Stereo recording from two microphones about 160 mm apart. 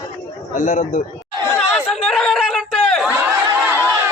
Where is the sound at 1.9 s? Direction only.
Centre (ahead or behind).